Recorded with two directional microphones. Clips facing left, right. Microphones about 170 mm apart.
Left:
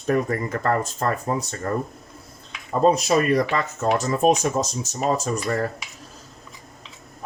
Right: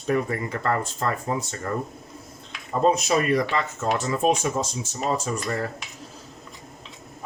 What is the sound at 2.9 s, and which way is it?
Speech, 40° left (ahead or behind).